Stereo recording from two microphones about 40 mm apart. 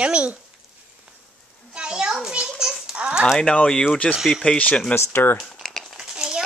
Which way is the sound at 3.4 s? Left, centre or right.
Left.